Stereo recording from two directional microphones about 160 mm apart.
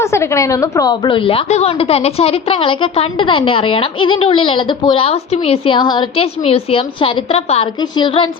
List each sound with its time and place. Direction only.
0.0 s a woman's voice: 15° left (ahead or behind); by 7.7 s 40° left (ahead or behind)
7.8 s a woman's voice: 30° left (ahead or behind)